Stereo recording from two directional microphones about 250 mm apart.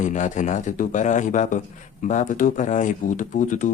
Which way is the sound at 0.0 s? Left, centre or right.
Left.